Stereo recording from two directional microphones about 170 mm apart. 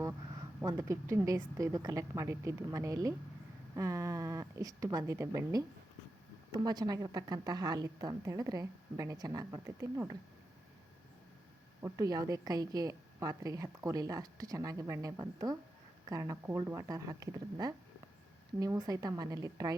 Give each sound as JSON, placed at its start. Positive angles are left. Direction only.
{"t": 0.6, "sound": "a woman's voice", "side_deg": -20}
{"t": 11.8, "sound": "a woman's voice", "side_deg": -20}